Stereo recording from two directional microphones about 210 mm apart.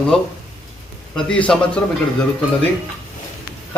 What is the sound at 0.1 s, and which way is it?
Speech, centre (ahead or behind).